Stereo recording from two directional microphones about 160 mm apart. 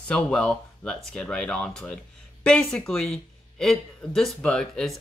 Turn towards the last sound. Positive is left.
turn(degrees=5)  # may be behind; listen again after turning